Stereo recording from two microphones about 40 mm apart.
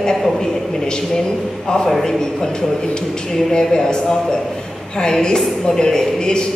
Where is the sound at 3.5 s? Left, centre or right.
Centre.